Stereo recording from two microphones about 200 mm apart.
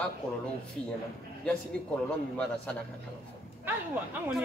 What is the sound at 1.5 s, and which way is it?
Speech, 5° left (ahead or behind).